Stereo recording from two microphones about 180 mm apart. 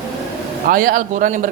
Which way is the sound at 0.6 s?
50° right (ahead or behind).